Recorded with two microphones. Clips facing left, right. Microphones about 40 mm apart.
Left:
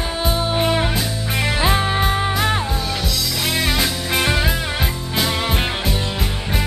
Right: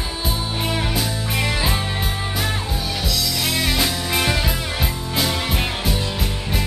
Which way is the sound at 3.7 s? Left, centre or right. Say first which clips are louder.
Left 1 dB; centre.